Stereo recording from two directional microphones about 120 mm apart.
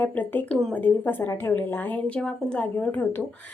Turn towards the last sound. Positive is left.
turn(degrees=15)  # may be behind; listen again after turning